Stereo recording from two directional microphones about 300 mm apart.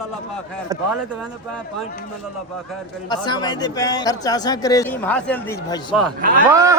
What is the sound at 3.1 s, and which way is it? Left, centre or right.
A man's voice, centre.